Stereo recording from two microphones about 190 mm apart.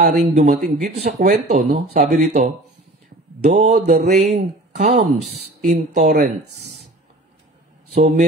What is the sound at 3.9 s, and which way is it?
Speech, 35° right (ahead or behind).